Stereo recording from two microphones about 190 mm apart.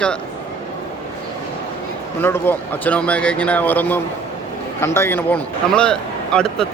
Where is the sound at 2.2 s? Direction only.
10° left (ahead or behind).